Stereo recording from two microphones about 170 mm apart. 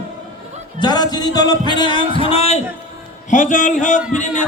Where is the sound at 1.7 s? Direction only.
30° left (ahead or behind).